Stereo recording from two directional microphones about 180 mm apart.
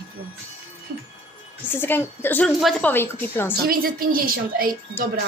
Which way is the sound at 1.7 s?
10° left (ahead or behind).